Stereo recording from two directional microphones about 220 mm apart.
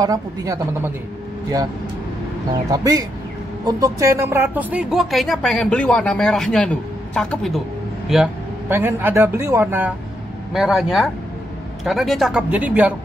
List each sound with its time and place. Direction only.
0.0 s speech: 15° right (ahead or behind)
2.7 s speech: 15° right (ahead or behind)